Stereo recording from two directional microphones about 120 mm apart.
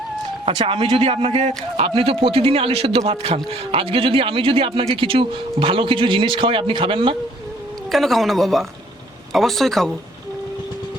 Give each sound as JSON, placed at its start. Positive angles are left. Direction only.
{"t": 0.4, "sound": "speech", "side_deg": -50}
{"t": 7.9, "sound": "speech", "side_deg": 0}